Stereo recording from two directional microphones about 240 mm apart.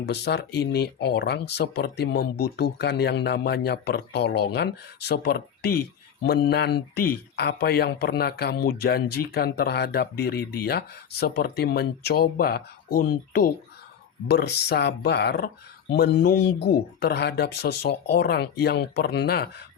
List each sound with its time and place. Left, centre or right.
0.0 s a man's voice: left